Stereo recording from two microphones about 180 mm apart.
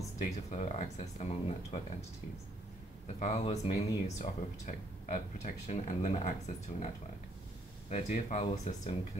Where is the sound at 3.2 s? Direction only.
35° left (ahead or behind).